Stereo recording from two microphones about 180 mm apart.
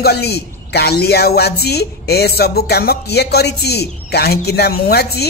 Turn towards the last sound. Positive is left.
turn(degrees=60)  # may be behind; listen again after turning